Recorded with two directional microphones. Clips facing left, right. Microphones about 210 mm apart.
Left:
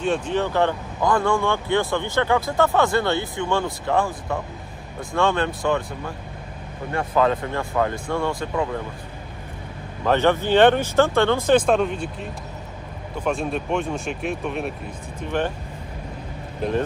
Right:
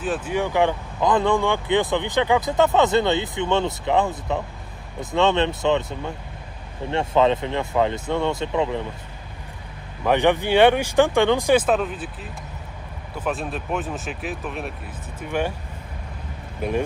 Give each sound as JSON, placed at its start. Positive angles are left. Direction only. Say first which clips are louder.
{"t": 0.0, "sound": "speech", "louder": "left 2 dB", "side_deg": -5}
{"t": 10.0, "sound": "speech", "louder": "even", "side_deg": -15}